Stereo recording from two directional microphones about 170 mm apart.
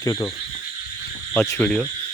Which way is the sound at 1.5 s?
10° left (ahead or behind).